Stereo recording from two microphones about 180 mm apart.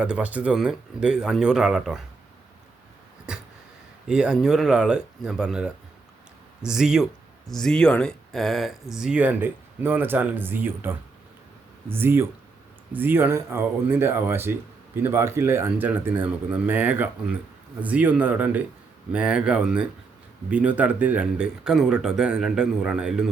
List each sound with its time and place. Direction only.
0.0 s speech: 5° right (ahead or behind)
3.3 s a sound: 5° right (ahead or behind)
4.1 s speech: 5° right (ahead or behind)